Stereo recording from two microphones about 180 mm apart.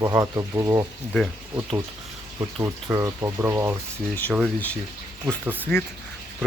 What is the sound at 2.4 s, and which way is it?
Speech, 15° right (ahead or behind).